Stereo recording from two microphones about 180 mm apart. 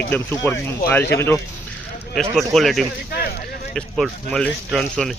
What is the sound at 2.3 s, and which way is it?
Speech, centre (ahead or behind).